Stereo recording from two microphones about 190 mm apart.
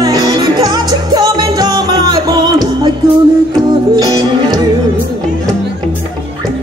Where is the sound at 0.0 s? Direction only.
20° right (ahead or behind).